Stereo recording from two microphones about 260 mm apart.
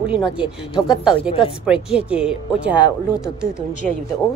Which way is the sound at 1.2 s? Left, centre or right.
Left.